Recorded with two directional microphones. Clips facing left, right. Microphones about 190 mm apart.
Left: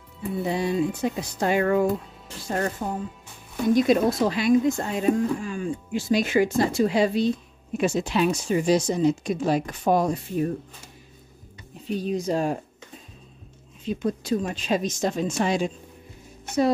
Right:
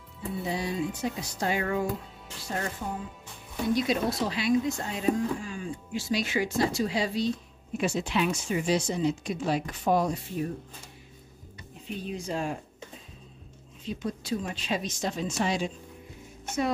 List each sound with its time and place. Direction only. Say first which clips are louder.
0.5 s speech: left 7 dB; 55° left (ahead or behind)
11.8 s speech: left 9 dB; 40° left (ahead or behind)
13.8 s speech: left 7 dB; 50° left (ahead or behind)